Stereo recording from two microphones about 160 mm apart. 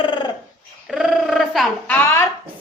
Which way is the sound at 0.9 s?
Centre (ahead or behind).